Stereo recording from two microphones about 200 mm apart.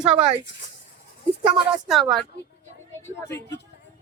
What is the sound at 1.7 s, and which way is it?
Speech, centre (ahead or behind).